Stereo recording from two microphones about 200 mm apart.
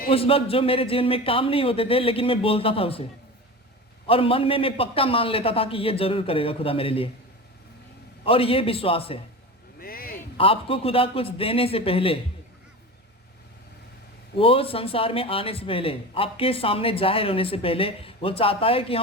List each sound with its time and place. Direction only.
0.1 s speech: 30° left (ahead or behind)
4.0 s speech: 25° left (ahead or behind)
8.2 s speech: 25° left (ahead or behind)
9.8 s a sound: 45° left (ahead or behind)
10.3 s speech: 25° left (ahead or behind)
14.3 s speech: 25° left (ahead or behind)